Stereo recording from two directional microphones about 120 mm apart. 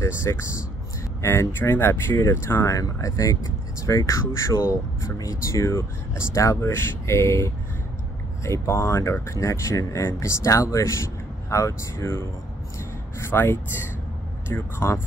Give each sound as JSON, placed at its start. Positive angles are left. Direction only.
{"t": 0.0, "sound": "speech", "side_deg": 20}
{"t": 13.3, "sound": "speech", "side_deg": 20}